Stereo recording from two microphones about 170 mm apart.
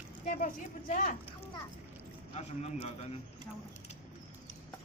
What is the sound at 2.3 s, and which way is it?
Speech, 40° left (ahead or behind).